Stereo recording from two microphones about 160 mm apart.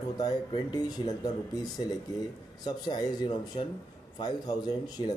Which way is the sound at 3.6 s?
35° left (ahead or behind).